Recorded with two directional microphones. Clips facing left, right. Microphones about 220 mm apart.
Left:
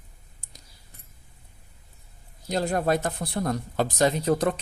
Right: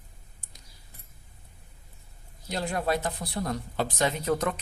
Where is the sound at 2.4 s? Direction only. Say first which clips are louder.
Left 5 dB; 40° left (ahead or behind).